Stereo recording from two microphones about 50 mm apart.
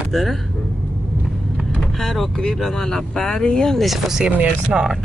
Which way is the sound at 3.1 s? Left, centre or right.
Centre.